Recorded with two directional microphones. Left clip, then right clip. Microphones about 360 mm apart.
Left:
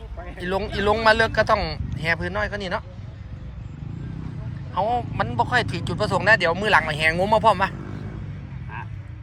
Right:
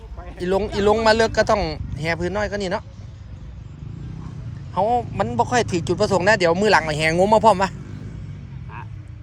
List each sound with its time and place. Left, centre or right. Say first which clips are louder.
0.3 s speech: right 4 dB; centre
4.7 s speech: right 3 dB; centre